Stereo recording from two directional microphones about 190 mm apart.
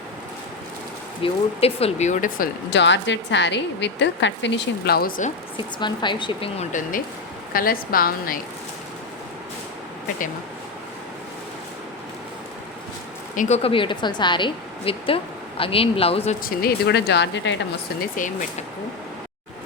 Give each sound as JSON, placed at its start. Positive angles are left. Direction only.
{"t": 1.2, "sound": "speech", "side_deg": 30}
{"t": 2.6, "sound": "speech", "side_deg": 70}
{"t": 5.5, "sound": "a woman's voice", "side_deg": 25}
{"t": 13.3, "sound": "speech", "side_deg": 40}
{"t": 16.4, "sound": "speech", "side_deg": 55}
{"t": 18.2, "sound": "a woman's voice", "side_deg": 45}